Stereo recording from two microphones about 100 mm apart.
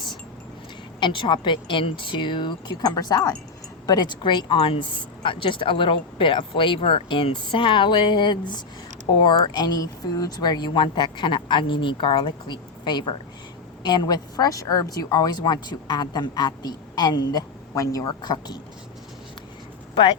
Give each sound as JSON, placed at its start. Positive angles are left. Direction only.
{"t": 0.9, "sound": "speech", "side_deg": 55}
{"t": 2.8, "sound": "speech", "side_deg": 40}